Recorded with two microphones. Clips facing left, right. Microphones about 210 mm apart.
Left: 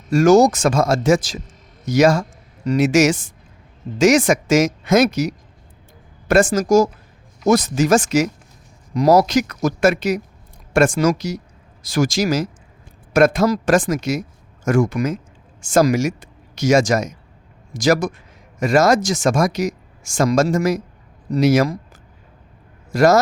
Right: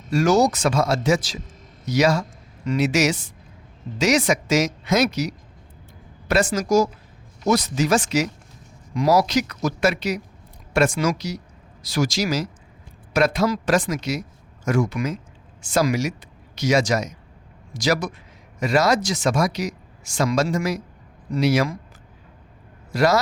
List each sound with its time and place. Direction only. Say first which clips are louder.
0.1 s speech: left 6 dB; 45° left (ahead or behind)
22.9 s speech: left 5 dB; 45° left (ahead or behind)